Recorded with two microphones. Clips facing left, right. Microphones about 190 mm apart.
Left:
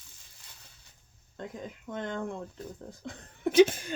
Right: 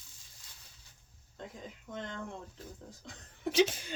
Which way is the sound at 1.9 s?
55° left (ahead or behind).